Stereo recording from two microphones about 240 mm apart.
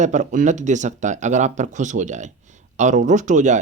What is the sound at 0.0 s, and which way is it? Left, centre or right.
Speech, right.